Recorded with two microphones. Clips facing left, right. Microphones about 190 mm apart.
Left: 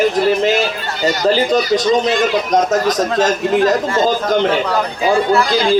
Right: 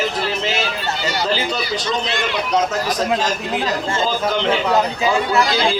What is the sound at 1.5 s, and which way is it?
Speech, 40° left (ahead or behind).